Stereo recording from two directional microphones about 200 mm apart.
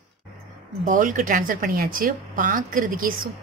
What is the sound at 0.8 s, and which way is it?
Speech, 40° right (ahead or behind).